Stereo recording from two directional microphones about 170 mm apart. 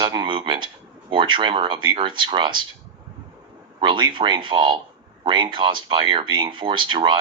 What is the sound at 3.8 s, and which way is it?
Speech, 30° right (ahead or behind).